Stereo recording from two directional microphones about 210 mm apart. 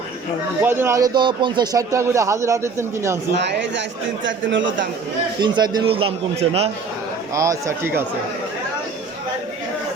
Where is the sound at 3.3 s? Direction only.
55° right (ahead or behind).